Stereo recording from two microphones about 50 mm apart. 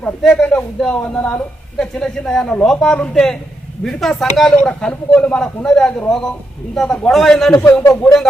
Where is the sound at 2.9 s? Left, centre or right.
Left.